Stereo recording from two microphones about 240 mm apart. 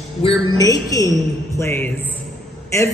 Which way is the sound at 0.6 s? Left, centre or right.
Centre.